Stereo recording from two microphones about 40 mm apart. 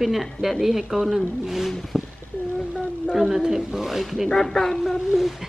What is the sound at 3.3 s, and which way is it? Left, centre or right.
Speech, centre.